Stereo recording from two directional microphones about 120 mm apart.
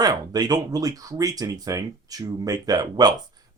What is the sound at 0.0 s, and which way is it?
Speech, 35° right (ahead or behind).